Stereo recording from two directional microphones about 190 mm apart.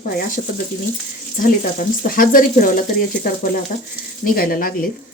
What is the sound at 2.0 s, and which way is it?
Speech, 45° left (ahead or behind).